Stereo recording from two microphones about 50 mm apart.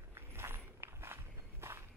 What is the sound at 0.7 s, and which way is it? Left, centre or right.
Walk, right.